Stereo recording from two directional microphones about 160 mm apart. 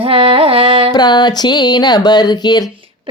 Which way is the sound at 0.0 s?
35° right (ahead or behind).